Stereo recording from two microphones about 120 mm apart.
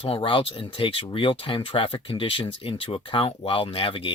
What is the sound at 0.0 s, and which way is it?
Speech, 50° left (ahead or behind).